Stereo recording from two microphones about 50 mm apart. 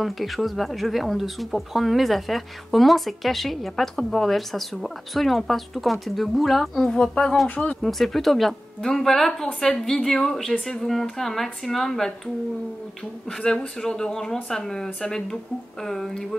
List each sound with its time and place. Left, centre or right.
0.0 s speech: centre
6.9 s speech: centre
7.4 s speech: left
7.8 s speech: centre
13.4 s speech: centre